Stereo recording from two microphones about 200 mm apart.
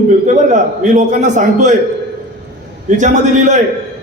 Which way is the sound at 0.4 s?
40° right (ahead or behind).